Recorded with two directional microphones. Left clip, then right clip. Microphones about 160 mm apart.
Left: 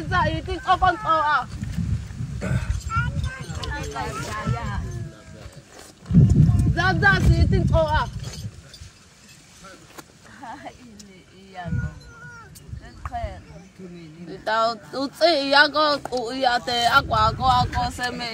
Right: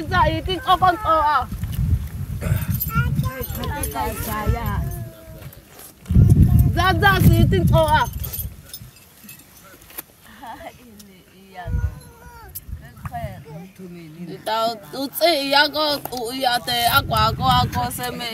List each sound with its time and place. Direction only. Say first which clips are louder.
0.1 s speech: right 4 dB; 15° right (ahead or behind)
2.4 s speech: even; 5° left (ahead or behind)
2.9 s clip-clop: right 1 dB; 90° right
3.7 s speech: right 3 dB; 85° right
6.7 s speech: right 3 dB; 15° right (ahead or behind)
7.0 s speech: right 2 dB; 35° right (ahead or behind)
9.9 s a sound: right 1 dB; centre (ahead or behind)
11.6 s speech: even; 10° left (ahead or behind)
13.0 s a sound: even; 10° left (ahead or behind)
14.2 s speech: even; centre (ahead or behind)